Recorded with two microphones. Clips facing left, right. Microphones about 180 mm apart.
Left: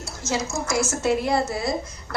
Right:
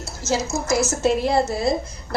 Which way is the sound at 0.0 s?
5° right (ahead or behind).